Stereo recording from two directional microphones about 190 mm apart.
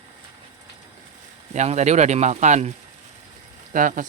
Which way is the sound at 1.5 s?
35° right (ahead or behind).